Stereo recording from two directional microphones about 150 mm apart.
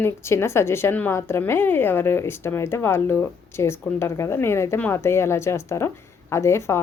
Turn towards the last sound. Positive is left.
turn(degrees=15)  # may be behind; listen again after turning